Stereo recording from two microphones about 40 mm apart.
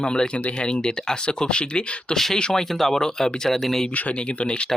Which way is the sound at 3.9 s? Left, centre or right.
Left.